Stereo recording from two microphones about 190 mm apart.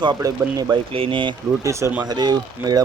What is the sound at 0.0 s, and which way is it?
Speech, 20° right (ahead or behind).